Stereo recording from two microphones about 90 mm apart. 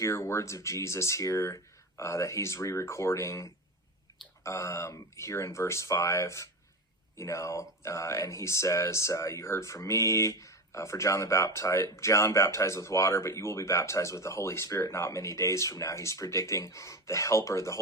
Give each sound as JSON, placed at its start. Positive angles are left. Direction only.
{"t": 0.0, "sound": "speech", "side_deg": 30}